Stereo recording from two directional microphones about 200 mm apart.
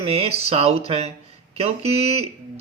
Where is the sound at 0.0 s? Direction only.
30° right (ahead or behind).